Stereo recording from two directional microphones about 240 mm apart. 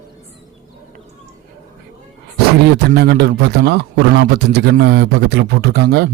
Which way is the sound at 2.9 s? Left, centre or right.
Right.